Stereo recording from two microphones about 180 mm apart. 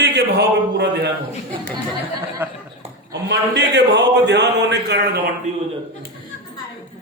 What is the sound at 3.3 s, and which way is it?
Speech, 75° right (ahead or behind).